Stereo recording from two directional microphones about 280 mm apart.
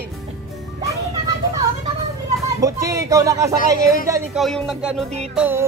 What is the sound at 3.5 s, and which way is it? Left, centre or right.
Speech, left.